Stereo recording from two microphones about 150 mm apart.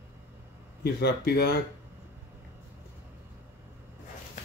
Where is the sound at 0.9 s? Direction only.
90° left.